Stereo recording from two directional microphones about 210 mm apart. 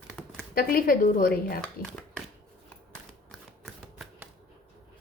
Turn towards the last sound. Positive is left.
turn(degrees=0)  # may be behind; listen again after turning